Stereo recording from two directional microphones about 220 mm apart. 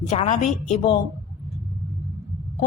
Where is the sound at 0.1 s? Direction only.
30° left (ahead or behind).